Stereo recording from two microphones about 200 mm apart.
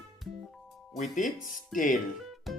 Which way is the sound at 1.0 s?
40° left (ahead or behind).